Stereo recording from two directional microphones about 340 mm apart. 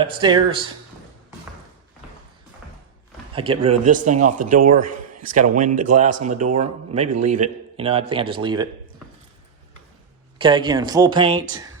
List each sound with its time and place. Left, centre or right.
0.0 s speech: centre
3.3 s a man's voice: centre
7.1 s a man's voice: right
7.4 s a man's voice: centre
10.3 s speech: centre